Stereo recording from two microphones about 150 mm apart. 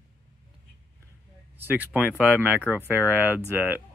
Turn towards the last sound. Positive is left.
turn(degrees=-15)  # may be behind; listen again after turning